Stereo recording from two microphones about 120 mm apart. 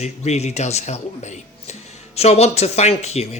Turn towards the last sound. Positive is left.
turn(degrees=65)  # may be behind; listen again after turning